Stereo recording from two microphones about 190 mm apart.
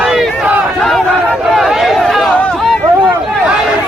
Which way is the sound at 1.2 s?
Centre (ahead or behind).